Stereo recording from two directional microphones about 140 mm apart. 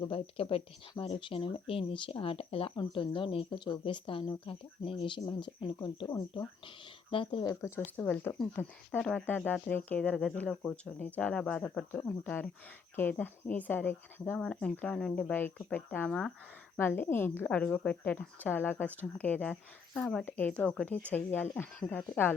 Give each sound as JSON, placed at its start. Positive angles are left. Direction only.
{"t": 0.1, "sound": "speech", "side_deg": 40}
{"t": 6.1, "sound": "speech", "side_deg": 25}
{"t": 7.1, "sound": "speech", "side_deg": 35}
{"t": 7.6, "sound": "speech", "side_deg": 10}
{"t": 16.7, "sound": "speech", "side_deg": 15}